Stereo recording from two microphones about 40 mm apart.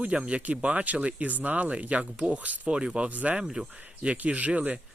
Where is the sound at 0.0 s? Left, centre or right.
Right.